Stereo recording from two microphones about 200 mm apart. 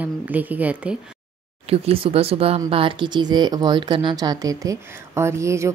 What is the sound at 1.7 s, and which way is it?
Speech, 30° right (ahead or behind).